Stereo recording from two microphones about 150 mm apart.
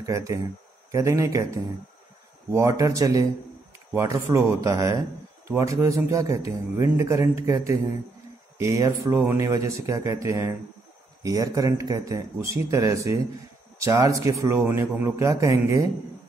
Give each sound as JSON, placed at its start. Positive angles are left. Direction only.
{"t": 0.0, "sound": "a man's voice", "side_deg": -20}